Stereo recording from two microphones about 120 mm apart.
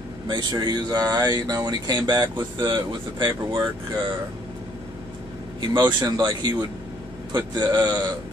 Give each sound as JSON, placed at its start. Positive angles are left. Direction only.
{"t": 0.3, "sound": "speech", "side_deg": -40}
{"t": 5.7, "sound": "speech", "side_deg": -40}